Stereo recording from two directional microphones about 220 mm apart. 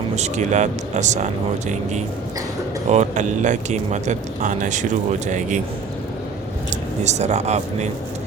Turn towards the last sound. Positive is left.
turn(degrees=-30)  # may be behind; listen again after turning